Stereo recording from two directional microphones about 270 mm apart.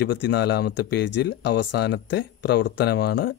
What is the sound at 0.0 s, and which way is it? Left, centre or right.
Speech, left.